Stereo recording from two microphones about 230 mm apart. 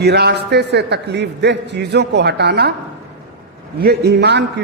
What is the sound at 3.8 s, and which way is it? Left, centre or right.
Speech, right.